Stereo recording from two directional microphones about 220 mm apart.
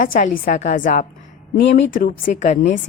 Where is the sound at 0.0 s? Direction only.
40° left (ahead or behind).